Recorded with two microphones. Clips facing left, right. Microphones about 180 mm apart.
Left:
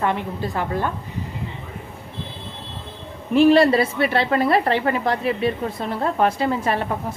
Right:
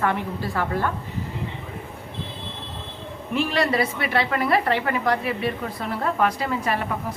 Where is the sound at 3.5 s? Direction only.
30° left (ahead or behind).